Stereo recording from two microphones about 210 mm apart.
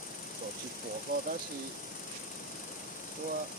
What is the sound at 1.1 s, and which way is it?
Speech, 45° right (ahead or behind).